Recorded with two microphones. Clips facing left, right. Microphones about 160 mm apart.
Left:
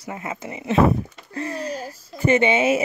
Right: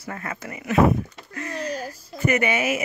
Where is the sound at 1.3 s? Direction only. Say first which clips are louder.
Left 2 dB; 30° left (ahead or behind).